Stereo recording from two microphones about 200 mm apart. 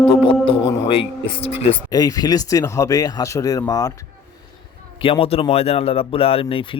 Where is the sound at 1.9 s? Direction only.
20° left (ahead or behind).